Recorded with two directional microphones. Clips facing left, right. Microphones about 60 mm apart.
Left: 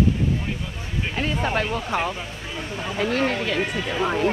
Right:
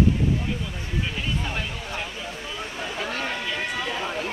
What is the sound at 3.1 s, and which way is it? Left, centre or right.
Speech, left.